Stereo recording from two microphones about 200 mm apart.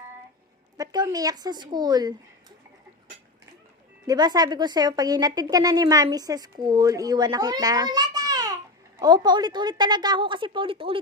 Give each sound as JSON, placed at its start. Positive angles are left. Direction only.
{"t": 0.8, "sound": "speech", "side_deg": -20}
{"t": 4.0, "sound": "speech", "side_deg": -20}